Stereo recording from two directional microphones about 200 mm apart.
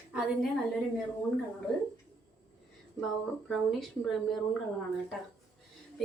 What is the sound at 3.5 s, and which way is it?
Speech, centre (ahead or behind).